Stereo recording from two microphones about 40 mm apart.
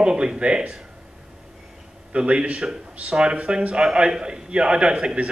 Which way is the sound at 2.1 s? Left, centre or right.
Right.